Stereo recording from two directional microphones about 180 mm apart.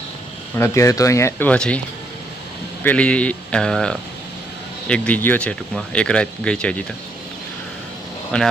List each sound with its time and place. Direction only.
0.5 s speech: 15° left (ahead or behind)
2.8 s speech: 5° left (ahead or behind)
8.3 s speech: 5° left (ahead or behind)